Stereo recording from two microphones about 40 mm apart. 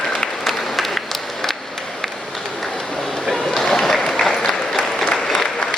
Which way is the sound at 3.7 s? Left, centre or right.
Centre.